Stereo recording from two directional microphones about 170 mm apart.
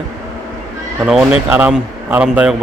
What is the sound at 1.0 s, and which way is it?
Speech, 5° right (ahead or behind).